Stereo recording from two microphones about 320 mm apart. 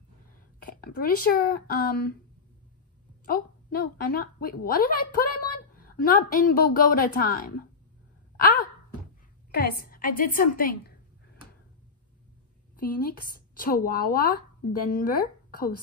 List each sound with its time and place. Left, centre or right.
0.6 s speech: left
3.3 s a woman's voice: left
8.4 s a sound: left
9.5 s a woman's voice: left
12.8 s a woman's voice: left